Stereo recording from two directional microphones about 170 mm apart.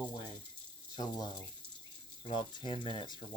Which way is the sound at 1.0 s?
25° left (ahead or behind).